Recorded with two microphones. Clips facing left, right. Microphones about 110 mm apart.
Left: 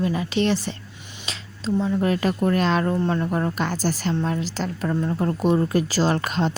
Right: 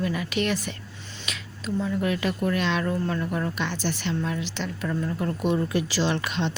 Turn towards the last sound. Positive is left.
turn(degrees=40)  # may be behind; listen again after turning